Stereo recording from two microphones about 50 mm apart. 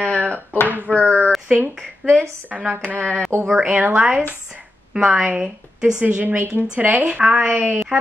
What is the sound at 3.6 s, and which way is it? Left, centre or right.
Speech, right.